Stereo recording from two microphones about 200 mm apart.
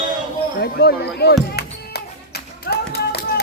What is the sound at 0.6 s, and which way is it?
Speech, 50° left (ahead or behind).